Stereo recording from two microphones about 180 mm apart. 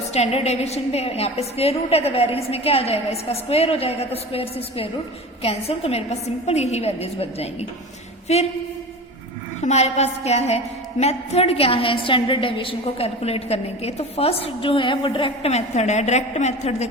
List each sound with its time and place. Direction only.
0.1 s a woman's voice: 35° left (ahead or behind)
9.6 s a woman's voice: 40° left (ahead or behind)